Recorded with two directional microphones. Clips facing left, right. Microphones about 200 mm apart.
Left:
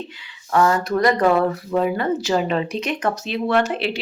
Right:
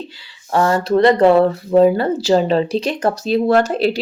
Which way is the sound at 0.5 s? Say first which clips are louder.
Right 3 dB; 30° right (ahead or behind).